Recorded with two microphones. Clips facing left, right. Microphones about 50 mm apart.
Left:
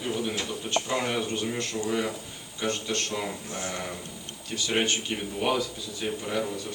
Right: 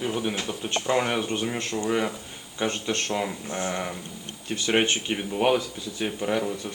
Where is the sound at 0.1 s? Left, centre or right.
Right.